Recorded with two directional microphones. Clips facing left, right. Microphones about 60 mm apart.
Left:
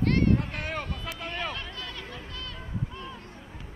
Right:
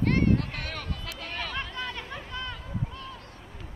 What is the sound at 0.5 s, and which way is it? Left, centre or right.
Vehicle, centre.